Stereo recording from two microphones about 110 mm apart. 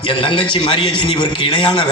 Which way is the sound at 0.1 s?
50° left (ahead or behind).